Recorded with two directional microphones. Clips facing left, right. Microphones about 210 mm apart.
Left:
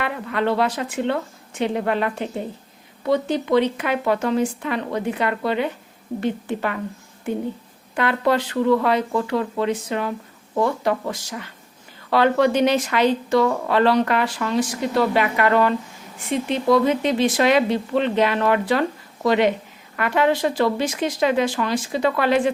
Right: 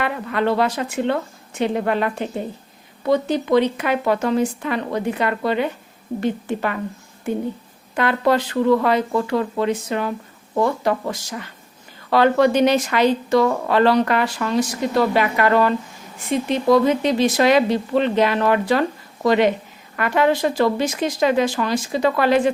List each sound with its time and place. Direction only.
0.0 s speech: 40° right (ahead or behind)
7.9 s speech: 40° right (ahead or behind)